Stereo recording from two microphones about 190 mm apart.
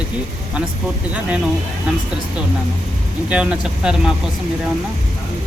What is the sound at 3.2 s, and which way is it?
Speech, 5° right (ahead or behind).